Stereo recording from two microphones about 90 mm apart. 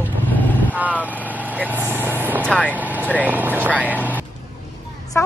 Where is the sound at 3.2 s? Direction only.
20° right (ahead or behind).